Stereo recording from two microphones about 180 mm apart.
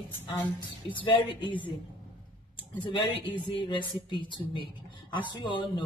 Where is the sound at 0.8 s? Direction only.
25° left (ahead or behind).